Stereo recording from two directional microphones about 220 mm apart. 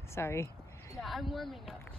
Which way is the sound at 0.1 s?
10° left (ahead or behind).